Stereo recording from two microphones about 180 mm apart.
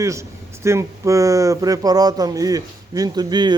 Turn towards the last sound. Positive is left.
turn(degrees=-25)  # may be behind; listen again after turning